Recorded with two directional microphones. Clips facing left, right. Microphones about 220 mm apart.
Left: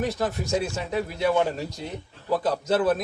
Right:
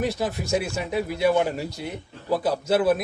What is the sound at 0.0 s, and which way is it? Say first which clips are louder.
A man's voice: right 1 dB; 10° right (ahead or behind).